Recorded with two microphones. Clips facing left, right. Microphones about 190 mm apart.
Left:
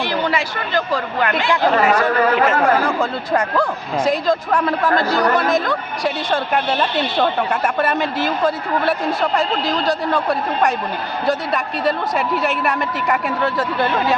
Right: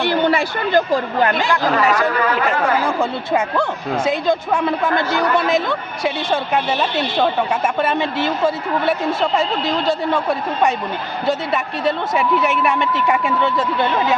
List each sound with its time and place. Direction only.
0.0 s speech: 55° right (ahead or behind)
1.2 s speech: 35° right (ahead or behind)
1.9 s speech: 40° left (ahead or behind)
3.0 s a woman's voice: 5° right (ahead or behind)
6.3 s a woman's voice: 5° right (ahead or behind)
7.8 s speech: 20° right (ahead or behind)